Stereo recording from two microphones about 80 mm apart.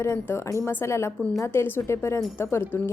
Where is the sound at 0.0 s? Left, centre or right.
Left.